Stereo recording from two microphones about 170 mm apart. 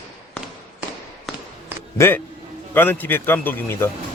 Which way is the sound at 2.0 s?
15° left (ahead or behind).